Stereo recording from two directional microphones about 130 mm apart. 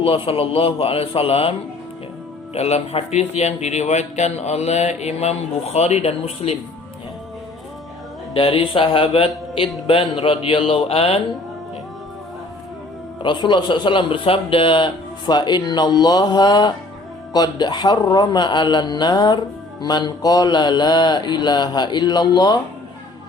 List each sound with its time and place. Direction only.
0.0 s speech: 45° left (ahead or behind)
2.6 s speech: 55° left (ahead or behind)
8.3 s speech: 45° left (ahead or behind)
13.2 s mantra: 35° left (ahead or behind)